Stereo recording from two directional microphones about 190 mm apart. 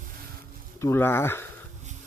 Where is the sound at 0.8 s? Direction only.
15° left (ahead or behind).